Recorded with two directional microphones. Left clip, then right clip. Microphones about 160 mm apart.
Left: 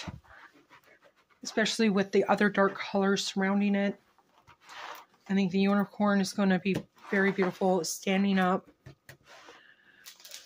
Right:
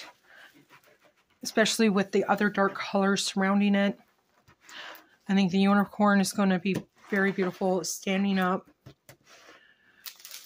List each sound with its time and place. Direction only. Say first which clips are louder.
1.4 s speech: right 4 dB; 25° right (ahead or behind); by 2.7 s 5° right (ahead or behind)
2.7 s speech: right 2 dB; 20° right (ahead or behind)
5.2 s speech: right 3 dB; 30° right (ahead or behind); by 8.6 s centre (ahead or behind)